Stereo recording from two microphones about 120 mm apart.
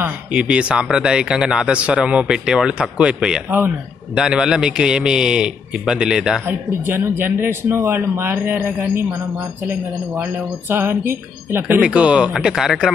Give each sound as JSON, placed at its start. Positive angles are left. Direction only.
{"t": 0.0, "sound": "a man's voice", "side_deg": -10}
{"t": 6.4, "sound": "speech", "side_deg": -20}
{"t": 10.7, "sound": "speech", "side_deg": -20}